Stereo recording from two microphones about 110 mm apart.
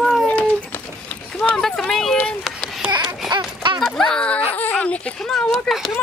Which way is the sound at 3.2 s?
45° right (ahead or behind).